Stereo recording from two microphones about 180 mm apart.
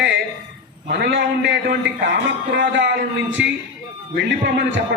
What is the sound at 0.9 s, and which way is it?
A man's voice, 70° right (ahead or behind).